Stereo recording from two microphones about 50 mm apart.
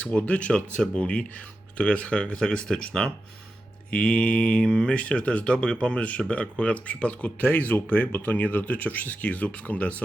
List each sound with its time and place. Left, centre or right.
0.0 s speech: left